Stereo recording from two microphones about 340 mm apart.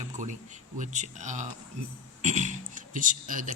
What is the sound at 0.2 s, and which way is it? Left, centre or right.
Speech, right.